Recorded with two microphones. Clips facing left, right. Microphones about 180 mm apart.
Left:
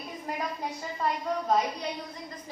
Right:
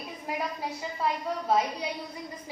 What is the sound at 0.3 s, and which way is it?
Speech, 5° right (ahead or behind).